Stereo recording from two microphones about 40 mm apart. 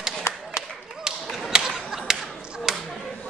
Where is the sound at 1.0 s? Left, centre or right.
Centre.